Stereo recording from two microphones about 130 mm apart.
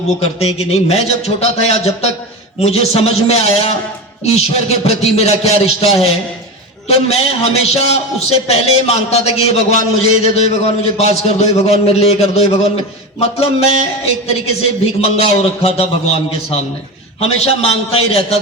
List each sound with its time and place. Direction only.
0.2 s a man's voice: 55° left (ahead or behind)